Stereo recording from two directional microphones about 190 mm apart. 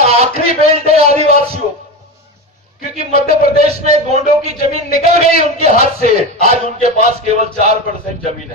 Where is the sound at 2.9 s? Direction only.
35° right (ahead or behind).